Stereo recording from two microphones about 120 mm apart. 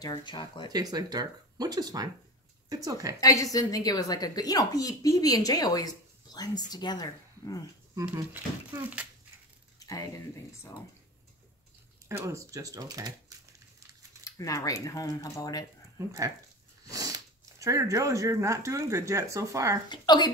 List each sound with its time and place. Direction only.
0.1 s speech: 40° left (ahead or behind)
0.7 s speech: 35° right (ahead or behind)
3.2 s speech: 30° left (ahead or behind)
8.3 s speech: 15° right (ahead or behind)
9.8 s a sound: 30° left (ahead or behind)
12.1 s speech: 25° right (ahead or behind)
14.2 s speech: 30° left (ahead or behind)
16.9 s speech: 30° right (ahead or behind)
19.9 s speech: 35° left (ahead or behind)